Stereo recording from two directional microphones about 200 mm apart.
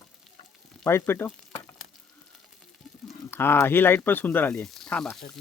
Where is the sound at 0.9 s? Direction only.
10° left (ahead or behind).